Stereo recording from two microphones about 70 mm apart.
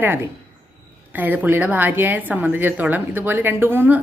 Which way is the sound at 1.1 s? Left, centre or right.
Right.